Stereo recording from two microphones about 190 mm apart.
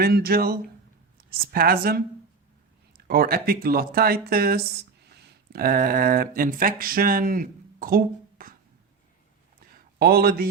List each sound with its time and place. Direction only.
0.0 s speech: 55° right (ahead or behind)
3.1 s speech: 50° right (ahead or behind)
9.7 s speech: 50° right (ahead or behind)